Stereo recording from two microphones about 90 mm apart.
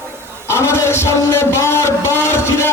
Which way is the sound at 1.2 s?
30° left (ahead or behind).